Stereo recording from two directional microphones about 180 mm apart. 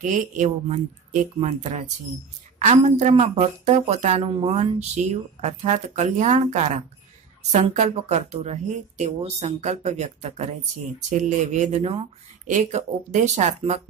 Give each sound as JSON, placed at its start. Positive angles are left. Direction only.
{"t": 0.0, "sound": "speech", "side_deg": -45}
{"t": 12.4, "sound": "speech", "side_deg": -45}